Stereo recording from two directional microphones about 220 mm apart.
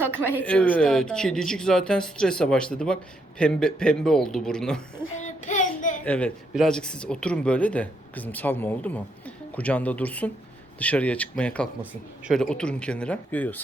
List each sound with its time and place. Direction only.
0.3 s speech: 5° left (ahead or behind)
5.1 s child singing: 35° left (ahead or behind)
6.1 s speech: 5° left (ahead or behind)